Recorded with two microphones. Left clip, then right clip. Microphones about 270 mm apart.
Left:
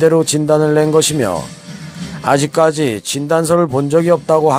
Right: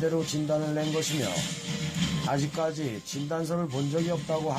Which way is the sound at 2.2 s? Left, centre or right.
Left.